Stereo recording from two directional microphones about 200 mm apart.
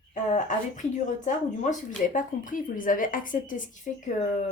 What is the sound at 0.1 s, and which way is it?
Speech, 40° left (ahead or behind).